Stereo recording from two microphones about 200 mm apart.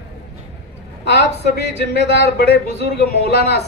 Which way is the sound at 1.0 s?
55° left (ahead or behind).